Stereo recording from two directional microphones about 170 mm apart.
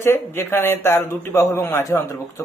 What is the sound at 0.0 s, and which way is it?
A man's voice, 15° left (ahead or behind).